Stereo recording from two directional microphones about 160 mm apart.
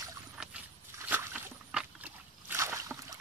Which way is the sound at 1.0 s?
10° right (ahead or behind).